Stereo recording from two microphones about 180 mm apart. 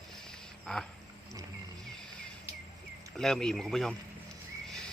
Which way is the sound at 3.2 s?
5° left (ahead or behind).